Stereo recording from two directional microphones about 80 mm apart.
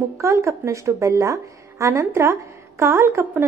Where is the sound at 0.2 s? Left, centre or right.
Right.